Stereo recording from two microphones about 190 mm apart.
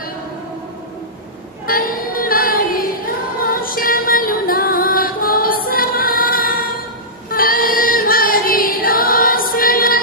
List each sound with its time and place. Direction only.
1.7 s music: 50° left (ahead or behind)
7.2 s female singing: 50° left (ahead or behind)